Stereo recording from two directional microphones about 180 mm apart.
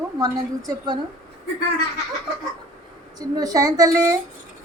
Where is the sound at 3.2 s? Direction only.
20° right (ahead or behind).